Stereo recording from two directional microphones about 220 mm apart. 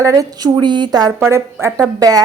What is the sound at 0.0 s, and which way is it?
A woman's voice, 15° right (ahead or behind).